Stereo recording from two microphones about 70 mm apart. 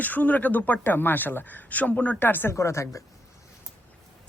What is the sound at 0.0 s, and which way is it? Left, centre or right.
Speech, left.